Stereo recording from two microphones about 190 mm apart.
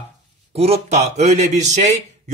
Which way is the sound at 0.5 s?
30° right (ahead or behind).